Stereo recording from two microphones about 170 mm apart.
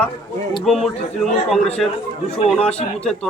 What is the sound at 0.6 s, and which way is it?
A man's voice, centre (ahead or behind).